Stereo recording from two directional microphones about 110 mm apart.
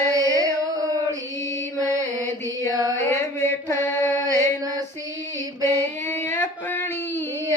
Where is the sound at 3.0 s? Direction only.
25° left (ahead or behind).